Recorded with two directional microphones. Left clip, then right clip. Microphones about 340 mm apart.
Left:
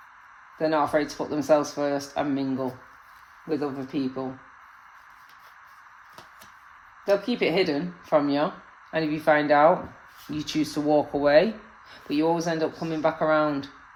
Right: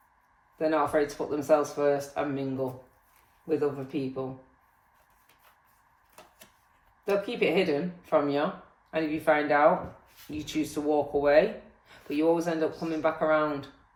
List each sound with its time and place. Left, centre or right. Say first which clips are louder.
0.6 s speech: left 2 dB; left
3.6 s speech: left 1 dB; left
7.0 s speech: left 3 dB; left